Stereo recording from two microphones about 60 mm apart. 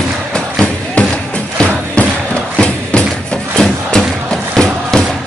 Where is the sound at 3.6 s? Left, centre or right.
Centre.